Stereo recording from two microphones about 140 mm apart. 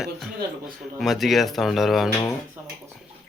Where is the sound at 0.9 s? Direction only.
Centre (ahead or behind).